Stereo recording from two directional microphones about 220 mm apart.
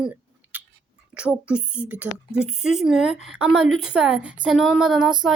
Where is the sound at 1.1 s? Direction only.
5° right (ahead or behind).